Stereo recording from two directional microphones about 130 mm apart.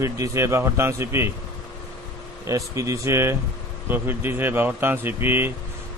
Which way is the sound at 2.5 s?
25° right (ahead or behind).